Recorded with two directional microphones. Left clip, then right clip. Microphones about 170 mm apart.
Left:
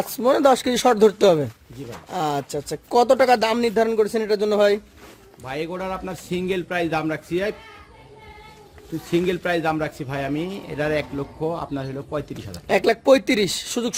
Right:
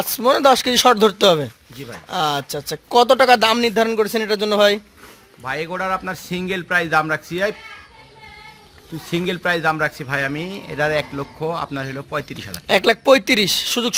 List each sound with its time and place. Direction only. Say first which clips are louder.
0.0 s chopping: right 3 dB; 10° left (ahead or behind)
2.0 s speech: right 4 dB; 10° left (ahead or behind)
5.5 s a man's voice: right 6 dB; 25° right (ahead or behind)
9.0 s a man's voice: right 1 dB; 30° right (ahead or behind)
12.6 s speech: right 3 dB; centre (ahead or behind)